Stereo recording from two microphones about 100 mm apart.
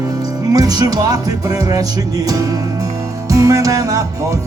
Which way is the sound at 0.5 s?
40° right (ahead or behind).